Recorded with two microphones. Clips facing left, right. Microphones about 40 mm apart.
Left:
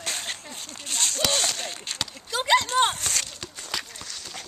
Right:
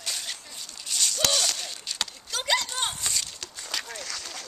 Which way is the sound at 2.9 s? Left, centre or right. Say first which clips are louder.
Left 2 dB; left.